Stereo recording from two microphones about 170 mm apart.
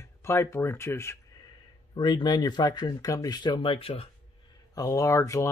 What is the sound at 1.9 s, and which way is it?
Speech, 25° left (ahead or behind).